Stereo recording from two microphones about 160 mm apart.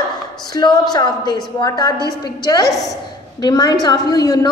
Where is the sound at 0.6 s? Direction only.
25° left (ahead or behind).